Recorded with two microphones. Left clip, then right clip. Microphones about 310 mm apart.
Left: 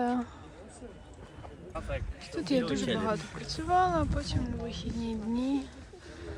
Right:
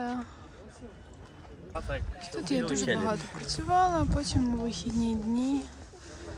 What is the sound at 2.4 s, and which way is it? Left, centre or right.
Speech, centre.